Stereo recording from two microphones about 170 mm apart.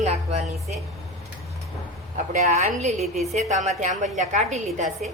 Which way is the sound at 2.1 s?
45° right (ahead or behind).